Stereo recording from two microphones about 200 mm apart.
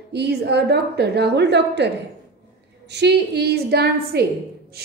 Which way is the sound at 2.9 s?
55° right (ahead or behind).